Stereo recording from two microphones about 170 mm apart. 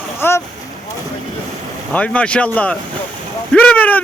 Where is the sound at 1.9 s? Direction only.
5° left (ahead or behind).